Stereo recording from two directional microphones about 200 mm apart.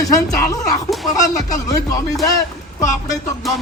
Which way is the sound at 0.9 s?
Centre (ahead or behind).